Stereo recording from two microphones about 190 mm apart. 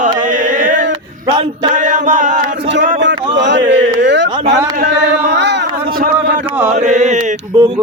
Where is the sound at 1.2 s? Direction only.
25° right (ahead or behind).